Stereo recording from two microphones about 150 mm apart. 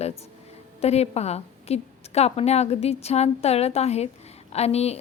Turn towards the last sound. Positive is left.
turn(degrees=45)  # may be behind; listen again after turning